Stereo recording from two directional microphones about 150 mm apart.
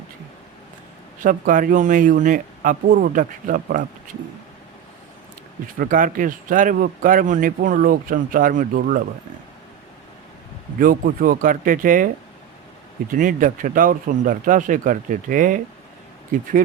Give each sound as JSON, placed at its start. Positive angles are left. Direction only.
{"t": 1.2, "sound": "speech", "side_deg": -65}
{"t": 5.8, "sound": "speech", "side_deg": -65}
{"t": 10.8, "sound": "speech", "side_deg": -70}